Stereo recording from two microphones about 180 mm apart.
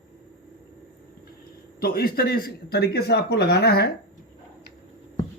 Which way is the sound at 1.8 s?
55° left (ahead or behind).